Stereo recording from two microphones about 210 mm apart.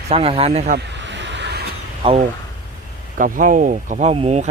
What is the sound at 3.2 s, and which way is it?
Speech, 40° right (ahead or behind).